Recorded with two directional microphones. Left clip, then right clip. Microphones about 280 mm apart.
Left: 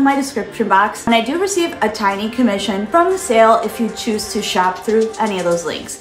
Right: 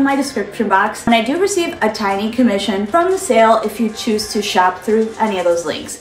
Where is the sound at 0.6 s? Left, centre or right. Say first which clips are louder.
Left 1 dB; centre.